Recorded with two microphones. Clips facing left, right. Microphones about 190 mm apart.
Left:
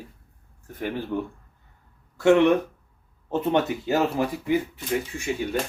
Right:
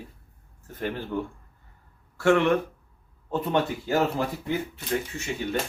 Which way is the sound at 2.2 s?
20° left (ahead or behind).